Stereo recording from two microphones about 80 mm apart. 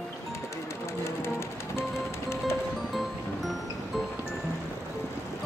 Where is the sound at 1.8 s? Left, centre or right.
Left.